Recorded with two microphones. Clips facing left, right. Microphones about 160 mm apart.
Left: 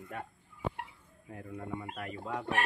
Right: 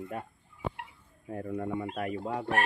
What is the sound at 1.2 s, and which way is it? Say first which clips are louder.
Speech: right 9 dB; 45° right (ahead or behind).